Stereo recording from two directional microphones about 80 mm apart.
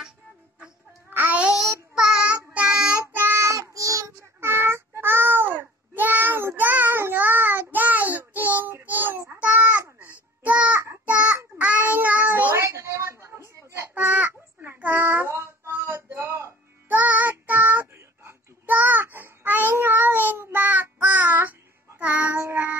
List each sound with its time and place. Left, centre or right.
1.1 s child singing: right
1.6 s child singing: centre
3.2 s child singing: right
4.4 s child singing: right
9.4 s a sound: centre
11.1 s child singing: centre
12.6 s a sound: right
13.9 s child singing: centre; by 16.5 s right
16.9 s child singing: right